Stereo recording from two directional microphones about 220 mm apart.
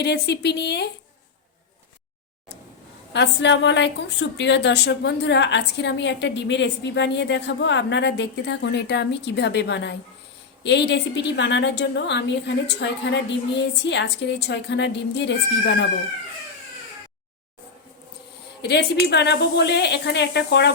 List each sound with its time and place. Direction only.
0.0 s a woman's voice: 50° left (ahead or behind)
3.1 s a woman's voice: 50° left (ahead or behind)
18.6 s a woman's voice: 50° left (ahead or behind)